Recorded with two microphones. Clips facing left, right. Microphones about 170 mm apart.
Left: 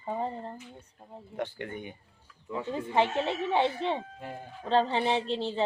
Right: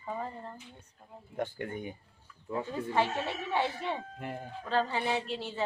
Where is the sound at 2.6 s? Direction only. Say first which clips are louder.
Left 4 dB; 20° left (ahead or behind).